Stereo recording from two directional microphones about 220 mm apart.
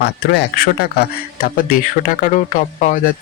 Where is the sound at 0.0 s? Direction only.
45° left (ahead or behind).